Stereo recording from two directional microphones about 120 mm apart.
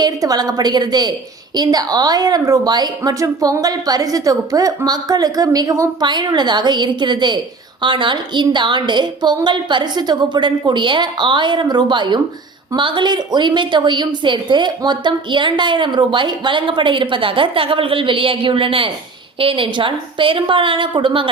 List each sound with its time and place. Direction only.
0.0 s a woman's voice: 35° right (ahead or behind)